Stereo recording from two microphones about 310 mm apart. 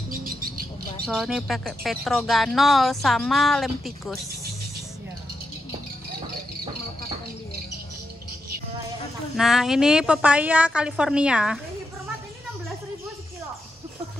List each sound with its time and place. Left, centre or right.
0.1 s bird: right
1.0 s speech: centre
9.4 s speech: centre